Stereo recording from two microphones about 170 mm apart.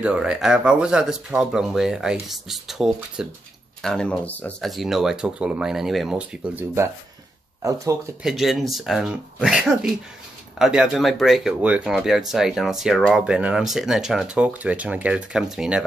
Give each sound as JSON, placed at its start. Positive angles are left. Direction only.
{"t": 0.0, "sound": "speech", "side_deg": -5}
{"t": 8.2, "sound": "speech", "side_deg": 0}